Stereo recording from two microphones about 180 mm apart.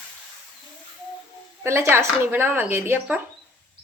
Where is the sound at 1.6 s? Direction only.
15° right (ahead or behind).